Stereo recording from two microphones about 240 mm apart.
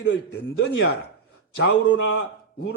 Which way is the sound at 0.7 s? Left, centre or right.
Left.